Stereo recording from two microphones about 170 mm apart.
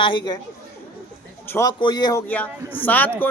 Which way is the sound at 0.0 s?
30° left (ahead or behind).